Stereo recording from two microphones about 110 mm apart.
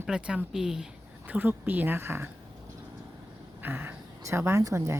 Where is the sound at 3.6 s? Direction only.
20° right (ahead or behind).